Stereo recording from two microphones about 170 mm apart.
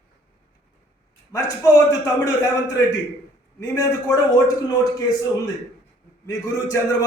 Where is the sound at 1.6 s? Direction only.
20° left (ahead or behind).